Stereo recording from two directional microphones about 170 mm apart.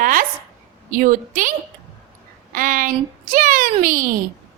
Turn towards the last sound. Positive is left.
turn(degrees=-55)  # may be behind; listen again after turning